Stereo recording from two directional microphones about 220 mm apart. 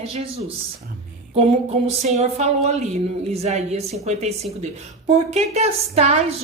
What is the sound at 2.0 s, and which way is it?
A woman's voice, 30° right (ahead or behind).